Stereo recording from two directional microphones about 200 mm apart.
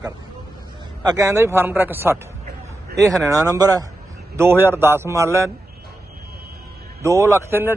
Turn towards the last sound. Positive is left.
turn(degrees=-10)  # may be behind; listen again after turning